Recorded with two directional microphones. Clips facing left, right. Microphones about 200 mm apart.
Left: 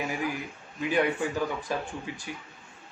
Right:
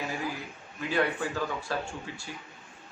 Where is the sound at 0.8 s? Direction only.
15° left (ahead or behind).